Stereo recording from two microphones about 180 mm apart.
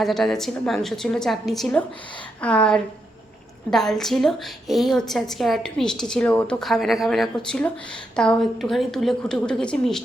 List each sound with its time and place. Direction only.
0.0 s a woman's voice: centre (ahead or behind)